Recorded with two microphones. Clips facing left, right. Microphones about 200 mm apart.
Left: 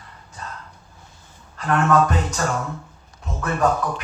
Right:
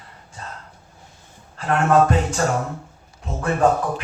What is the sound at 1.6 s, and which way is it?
A man's voice, 30° right (ahead or behind).